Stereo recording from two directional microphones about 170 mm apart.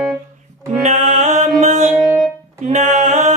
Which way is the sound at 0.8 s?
45° right (ahead or behind).